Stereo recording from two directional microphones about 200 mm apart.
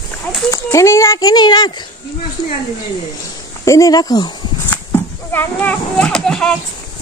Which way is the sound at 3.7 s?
15° left (ahead or behind).